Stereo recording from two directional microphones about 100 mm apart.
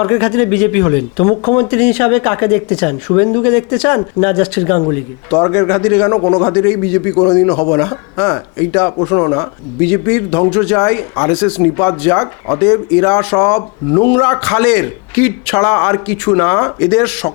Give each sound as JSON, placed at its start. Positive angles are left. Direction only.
{"t": 0.0, "sound": "speech", "side_deg": 20}